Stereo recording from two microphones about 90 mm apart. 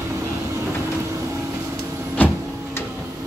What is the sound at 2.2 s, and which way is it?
Printer, 15° left (ahead or behind).